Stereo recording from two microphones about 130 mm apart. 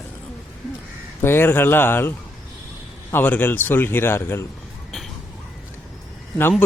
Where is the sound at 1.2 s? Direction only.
15° left (ahead or behind).